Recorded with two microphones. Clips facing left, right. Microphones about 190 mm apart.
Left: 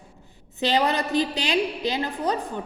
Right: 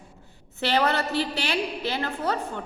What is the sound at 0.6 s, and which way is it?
Speech, 15° left (ahead or behind).